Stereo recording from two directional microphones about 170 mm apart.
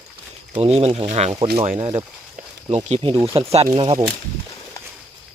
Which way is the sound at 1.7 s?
35° right (ahead or behind).